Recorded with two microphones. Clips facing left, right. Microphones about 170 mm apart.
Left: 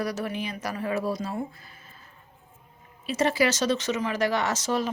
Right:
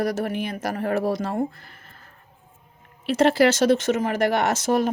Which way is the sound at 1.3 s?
60° right (ahead or behind).